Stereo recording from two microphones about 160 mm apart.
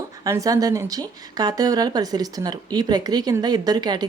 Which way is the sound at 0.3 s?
20° right (ahead or behind).